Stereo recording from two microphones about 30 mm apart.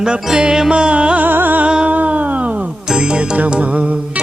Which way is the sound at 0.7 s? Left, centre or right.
Right.